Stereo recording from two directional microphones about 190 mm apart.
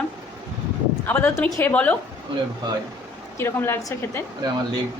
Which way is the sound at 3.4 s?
10° left (ahead or behind).